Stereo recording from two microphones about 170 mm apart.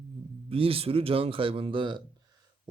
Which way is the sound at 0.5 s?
35° right (ahead or behind).